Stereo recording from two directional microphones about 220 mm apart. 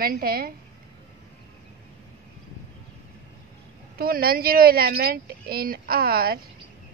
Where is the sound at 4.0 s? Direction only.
45° right (ahead or behind).